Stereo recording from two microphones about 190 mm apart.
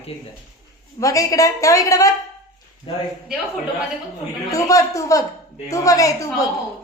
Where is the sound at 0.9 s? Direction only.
15° left (ahead or behind).